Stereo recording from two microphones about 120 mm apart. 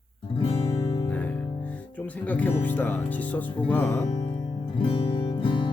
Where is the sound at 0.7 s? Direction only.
35° left (ahead or behind).